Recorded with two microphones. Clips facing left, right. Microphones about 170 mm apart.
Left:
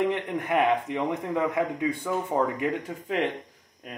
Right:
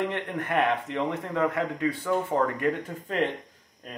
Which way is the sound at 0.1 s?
15° left (ahead or behind).